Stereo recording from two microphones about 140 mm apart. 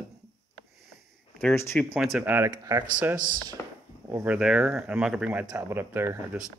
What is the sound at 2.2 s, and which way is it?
Speech, 15° right (ahead or behind).